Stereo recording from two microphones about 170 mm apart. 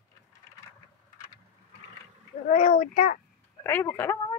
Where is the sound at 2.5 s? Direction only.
50° left (ahead or behind).